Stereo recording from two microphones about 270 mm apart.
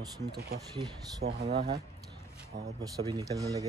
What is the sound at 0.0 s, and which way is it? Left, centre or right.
Speech, centre.